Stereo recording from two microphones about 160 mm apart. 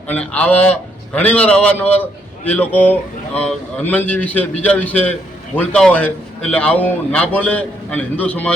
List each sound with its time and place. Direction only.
0.1 s a man's voice: 10° left (ahead or behind)